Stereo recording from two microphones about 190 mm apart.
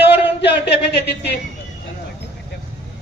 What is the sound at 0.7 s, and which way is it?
Speech, 60° left (ahead or behind).